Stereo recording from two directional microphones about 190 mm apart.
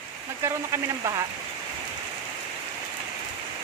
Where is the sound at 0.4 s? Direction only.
15° right (ahead or behind).